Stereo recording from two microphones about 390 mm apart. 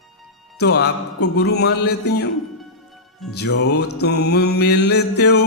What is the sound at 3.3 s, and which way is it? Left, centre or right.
Music, left.